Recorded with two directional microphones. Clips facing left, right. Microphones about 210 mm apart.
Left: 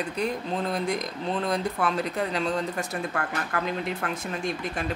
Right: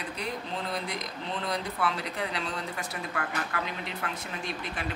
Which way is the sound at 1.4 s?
45° left (ahead or behind).